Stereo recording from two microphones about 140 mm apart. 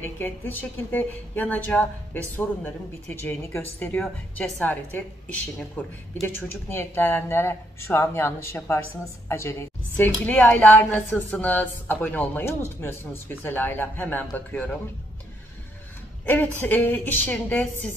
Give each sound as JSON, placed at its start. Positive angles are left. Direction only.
{"t": 0.0, "sound": "a woman's voice", "side_deg": 15}
{"t": 16.3, "sound": "a woman's voice", "side_deg": 10}